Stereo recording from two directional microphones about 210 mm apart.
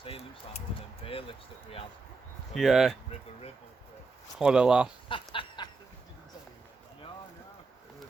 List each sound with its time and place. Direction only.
2.6 s speech: centre (ahead or behind)
4.4 s speech: 5° right (ahead or behind)
5.0 s a sound: 25° left (ahead or behind)